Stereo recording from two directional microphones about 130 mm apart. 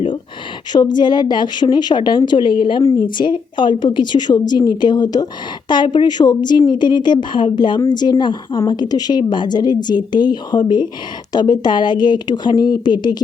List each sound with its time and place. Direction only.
0.7 s a woman's voice: 35° left (ahead or behind)